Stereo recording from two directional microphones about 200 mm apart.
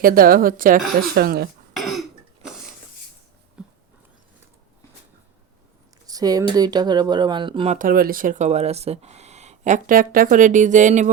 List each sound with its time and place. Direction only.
0.0 s speech: 45° right (ahead or behind)
1.7 s cough: centre (ahead or behind)
3.6 s a sound: 5° right (ahead or behind)
6.1 s speech: 20° right (ahead or behind)
7.8 s speech: 45° right (ahead or behind)